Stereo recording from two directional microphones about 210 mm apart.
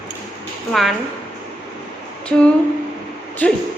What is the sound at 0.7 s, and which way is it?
Speech, centre (ahead or behind).